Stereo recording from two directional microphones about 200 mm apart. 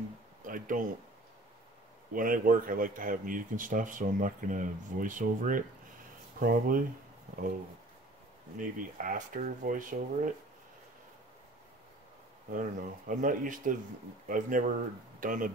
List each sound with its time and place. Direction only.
0.5 s speech: 45° right (ahead or behind)
2.1 s speech: 45° right (ahead or behind)
8.5 s speech: 40° right (ahead or behind)
12.5 s speech: 40° right (ahead or behind)